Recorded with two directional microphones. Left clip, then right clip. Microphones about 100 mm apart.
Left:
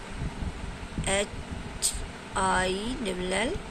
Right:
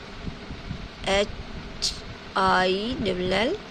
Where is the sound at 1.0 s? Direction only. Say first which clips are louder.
Right 5 dB; 50° right (ahead or behind).